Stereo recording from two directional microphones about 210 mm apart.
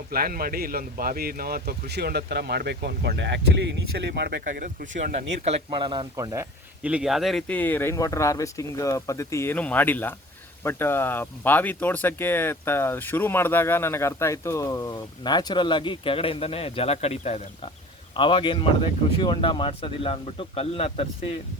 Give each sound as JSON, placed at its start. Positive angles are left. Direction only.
{"t": 0.1, "sound": "speech", "side_deg": -45}